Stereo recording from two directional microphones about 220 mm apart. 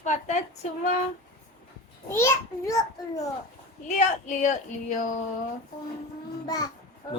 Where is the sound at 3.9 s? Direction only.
35° left (ahead or behind).